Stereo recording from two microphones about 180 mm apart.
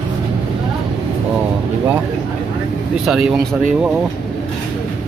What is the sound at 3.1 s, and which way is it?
Speech, centre (ahead or behind).